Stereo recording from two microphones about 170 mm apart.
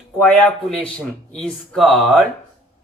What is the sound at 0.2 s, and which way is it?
Speech, 5° left (ahead or behind).